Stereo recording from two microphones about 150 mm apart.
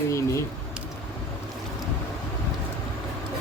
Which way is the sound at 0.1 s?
20° left (ahead or behind).